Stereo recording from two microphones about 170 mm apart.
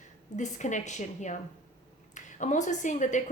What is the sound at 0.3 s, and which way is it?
A woman's voice, 45° left (ahead or behind).